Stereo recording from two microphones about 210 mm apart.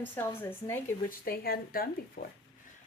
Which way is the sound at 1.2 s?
45° left (ahead or behind).